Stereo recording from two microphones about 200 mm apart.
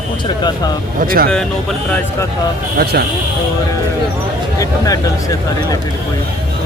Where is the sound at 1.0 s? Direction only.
45° right (ahead or behind).